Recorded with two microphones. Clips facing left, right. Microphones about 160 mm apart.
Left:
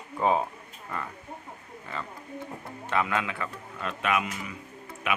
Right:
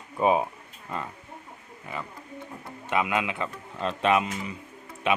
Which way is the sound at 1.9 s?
15° right (ahead or behind).